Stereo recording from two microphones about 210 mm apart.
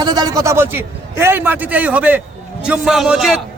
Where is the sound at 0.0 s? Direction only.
20° right (ahead or behind).